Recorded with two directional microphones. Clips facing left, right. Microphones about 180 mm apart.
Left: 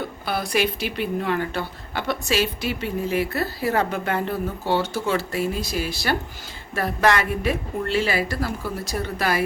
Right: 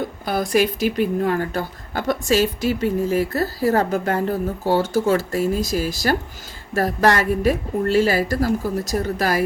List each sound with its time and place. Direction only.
0.3 s a woman's voice: 45° right (ahead or behind)